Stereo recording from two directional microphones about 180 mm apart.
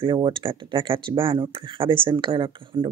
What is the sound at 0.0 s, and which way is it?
Speech, 25° right (ahead or behind).